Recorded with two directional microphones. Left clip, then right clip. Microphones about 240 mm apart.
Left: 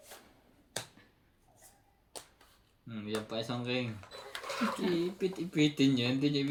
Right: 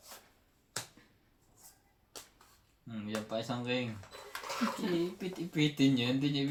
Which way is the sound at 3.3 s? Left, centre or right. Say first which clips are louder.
Right 3 dB; centre.